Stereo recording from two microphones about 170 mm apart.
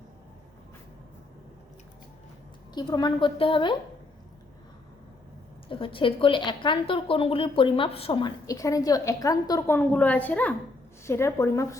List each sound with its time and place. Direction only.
2.7 s a woman's voice: 25° left (ahead or behind)
5.6 s a woman's voice: 30° left (ahead or behind)